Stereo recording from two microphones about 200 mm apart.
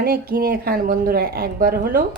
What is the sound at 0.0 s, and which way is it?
Speech, 50° right (ahead or behind).